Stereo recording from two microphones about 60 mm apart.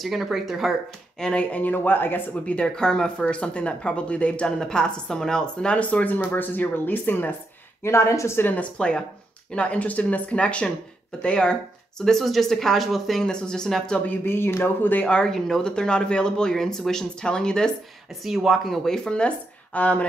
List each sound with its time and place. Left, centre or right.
0.0 s speech: centre
1.2 s speech: centre; by 2.2 s left
2.4 s speech: centre; by 7.2 s left
7.8 s a woman's voice: left
8.4 s speech: left
8.7 s speech: centre
12.0 s speech: centre
13.2 s speech: centre
14.2 s speech: left
15.0 s speech: centre
18.2 s speech: centre
18.9 s speech: centre